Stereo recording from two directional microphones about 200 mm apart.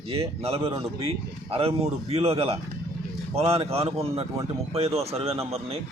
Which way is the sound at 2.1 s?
30° right (ahead or behind).